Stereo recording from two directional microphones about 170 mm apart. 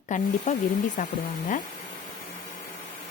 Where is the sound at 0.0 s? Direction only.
50° left (ahead or behind).